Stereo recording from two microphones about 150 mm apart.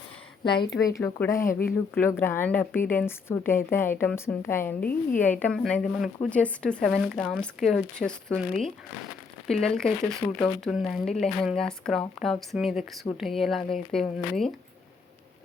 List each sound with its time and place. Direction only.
0.4 s a woman's voice: 30° left (ahead or behind); by 14.5 s 5° left (ahead or behind)